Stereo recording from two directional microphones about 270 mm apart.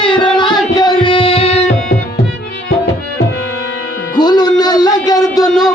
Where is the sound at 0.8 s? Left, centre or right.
Centre.